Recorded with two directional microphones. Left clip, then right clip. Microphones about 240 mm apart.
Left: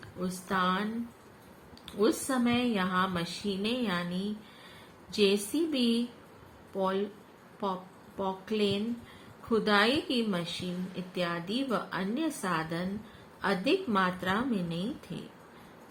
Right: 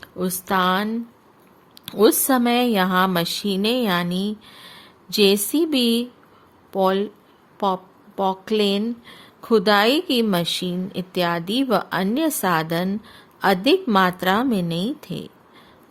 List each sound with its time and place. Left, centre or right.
0.0 s a woman's voice: right